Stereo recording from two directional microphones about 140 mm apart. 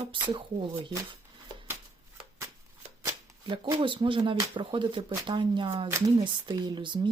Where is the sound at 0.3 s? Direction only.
35° right (ahead or behind).